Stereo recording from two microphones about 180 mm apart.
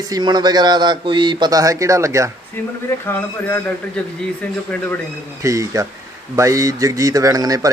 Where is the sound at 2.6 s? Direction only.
10° left (ahead or behind).